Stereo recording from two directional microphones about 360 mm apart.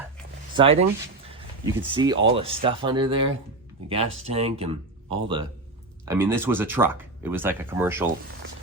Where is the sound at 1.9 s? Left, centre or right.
Centre.